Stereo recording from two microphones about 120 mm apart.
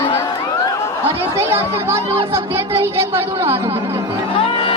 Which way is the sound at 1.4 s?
20° right (ahead or behind).